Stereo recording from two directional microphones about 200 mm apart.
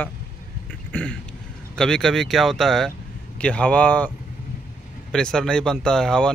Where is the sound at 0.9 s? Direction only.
5° left (ahead or behind).